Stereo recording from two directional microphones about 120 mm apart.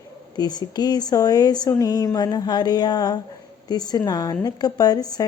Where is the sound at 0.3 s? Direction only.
35° left (ahead or behind).